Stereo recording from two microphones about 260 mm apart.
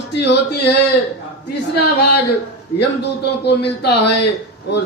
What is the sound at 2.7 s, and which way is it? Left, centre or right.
A man's voice, left.